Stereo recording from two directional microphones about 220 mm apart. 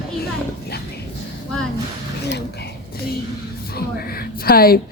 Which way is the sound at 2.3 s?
45° left (ahead or behind).